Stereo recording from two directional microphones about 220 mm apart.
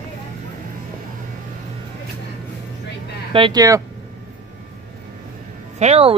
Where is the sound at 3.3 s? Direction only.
20° right (ahead or behind).